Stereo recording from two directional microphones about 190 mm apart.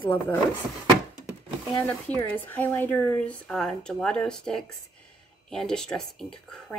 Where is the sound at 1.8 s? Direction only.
10° left (ahead or behind).